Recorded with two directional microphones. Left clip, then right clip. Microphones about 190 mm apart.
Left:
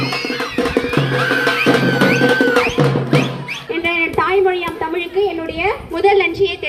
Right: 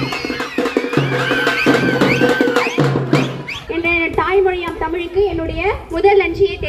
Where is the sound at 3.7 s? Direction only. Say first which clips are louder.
Right 1 dB; 20° left (ahead or behind).